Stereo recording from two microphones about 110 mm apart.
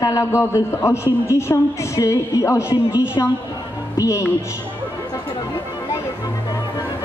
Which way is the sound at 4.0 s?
30° left (ahead or behind).